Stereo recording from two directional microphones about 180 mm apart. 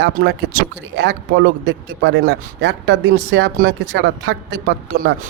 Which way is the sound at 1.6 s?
85° right.